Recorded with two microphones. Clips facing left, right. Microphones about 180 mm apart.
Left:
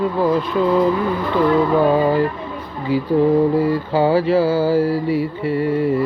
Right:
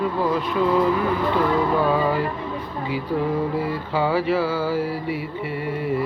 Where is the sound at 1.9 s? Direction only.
30° left (ahead or behind).